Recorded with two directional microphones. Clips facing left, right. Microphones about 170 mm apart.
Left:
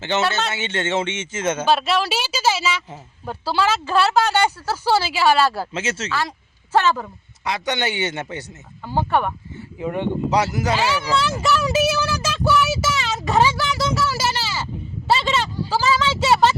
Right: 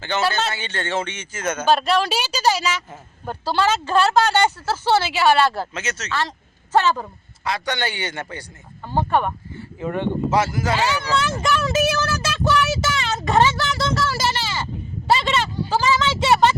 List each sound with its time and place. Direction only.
0.0 s speech: 25° left (ahead or behind)
1.6 s a woman's voice: 5° left (ahead or behind)
5.7 s speech: 30° left (ahead or behind)
6.1 s a woman's voice: 10° left (ahead or behind)
7.4 s speech: 20° left (ahead or behind)
8.8 s a woman's voice: 5° left (ahead or behind)
10.9 s speech: 10° left (ahead or behind)